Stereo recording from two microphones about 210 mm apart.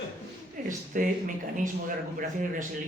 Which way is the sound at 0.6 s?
40° right (ahead or behind).